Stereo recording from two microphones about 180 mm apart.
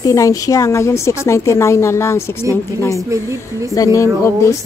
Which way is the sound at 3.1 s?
15° right (ahead or behind).